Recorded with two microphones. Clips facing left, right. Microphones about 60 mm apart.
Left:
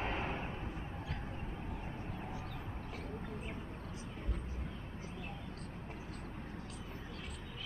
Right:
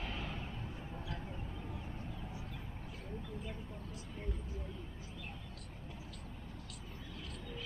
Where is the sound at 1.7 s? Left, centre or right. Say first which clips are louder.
Left 2 dB; left.